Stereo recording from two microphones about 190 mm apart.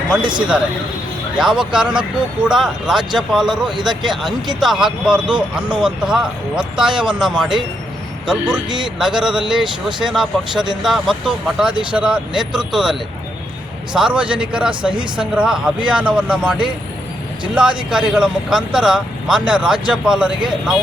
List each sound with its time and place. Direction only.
1.4 s speech: 5° right (ahead or behind)
14.9 s speech: 25° right (ahead or behind)
15.2 s speech: 5° right (ahead or behind)